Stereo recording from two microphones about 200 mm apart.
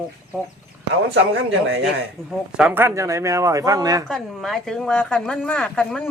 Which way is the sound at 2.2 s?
5° right (ahead or behind).